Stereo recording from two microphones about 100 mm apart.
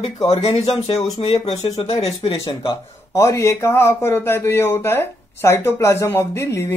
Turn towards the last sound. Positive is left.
turn(degrees=25)  # may be behind; listen again after turning